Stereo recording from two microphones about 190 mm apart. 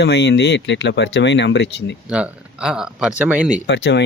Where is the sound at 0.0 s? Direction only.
60° left (ahead or behind).